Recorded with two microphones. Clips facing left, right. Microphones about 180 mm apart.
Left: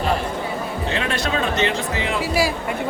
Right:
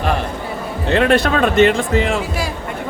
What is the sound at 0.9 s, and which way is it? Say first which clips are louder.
Speech: right 11 dB; 60° right (ahead or behind).